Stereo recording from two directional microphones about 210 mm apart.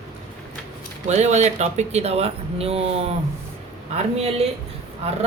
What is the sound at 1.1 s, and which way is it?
Speech, 35° right (ahead or behind).